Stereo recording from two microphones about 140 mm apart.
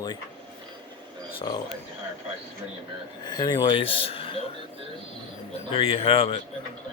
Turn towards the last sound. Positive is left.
turn(degrees=40)  # may be behind; listen again after turning